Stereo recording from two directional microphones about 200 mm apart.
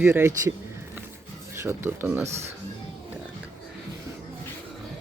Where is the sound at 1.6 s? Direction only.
10° right (ahead or behind).